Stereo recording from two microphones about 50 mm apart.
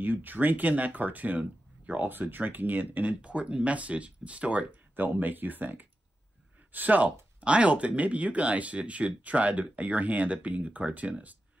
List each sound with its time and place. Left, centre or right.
0.0 s speech: right
3.2 s speech: right
4.6 s speech: right